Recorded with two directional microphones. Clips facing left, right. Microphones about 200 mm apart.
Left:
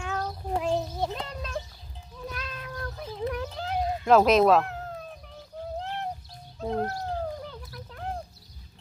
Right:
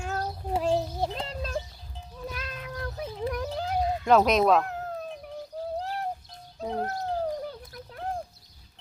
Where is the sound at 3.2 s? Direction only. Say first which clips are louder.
Right 1 dB; 40° right (ahead or behind).